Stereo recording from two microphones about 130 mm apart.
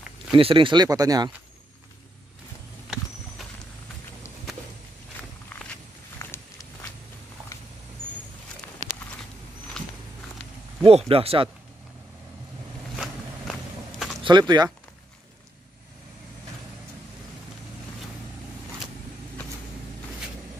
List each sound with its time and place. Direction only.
0.3 s speech: 45° right (ahead or behind)
0.8 s speech: 30° right (ahead or behind)
2.9 s horse: centre (ahead or behind)
6.1 s a sound: 25° left (ahead or behind)
8.8 s a sound: 60° right (ahead or behind)
9.8 s a sound: 5° left (ahead or behind)
10.9 s speech: 50° right (ahead or behind)
12.9 s walk: centre (ahead or behind)
14.2 s speech: 35° right (ahead or behind)